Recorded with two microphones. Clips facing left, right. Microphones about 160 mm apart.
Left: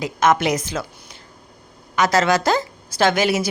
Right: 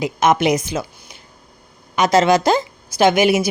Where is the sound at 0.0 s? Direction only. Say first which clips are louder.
Right 2 dB; 15° right (ahead or behind).